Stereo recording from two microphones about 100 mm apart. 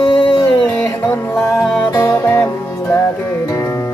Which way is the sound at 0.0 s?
50° left (ahead or behind).